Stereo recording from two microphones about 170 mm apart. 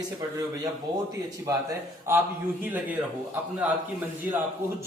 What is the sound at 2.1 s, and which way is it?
Speech, 15° right (ahead or behind).